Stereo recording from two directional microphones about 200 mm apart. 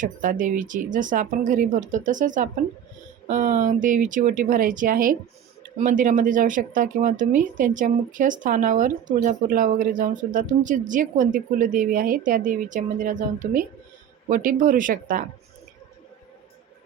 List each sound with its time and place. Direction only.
0.0 s speech: 40° right (ahead or behind)